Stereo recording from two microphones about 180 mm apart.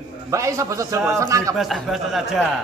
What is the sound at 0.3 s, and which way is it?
A man's voice, 15° right (ahead or behind).